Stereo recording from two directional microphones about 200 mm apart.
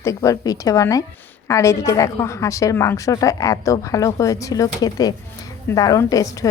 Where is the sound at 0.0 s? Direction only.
15° left (ahead or behind).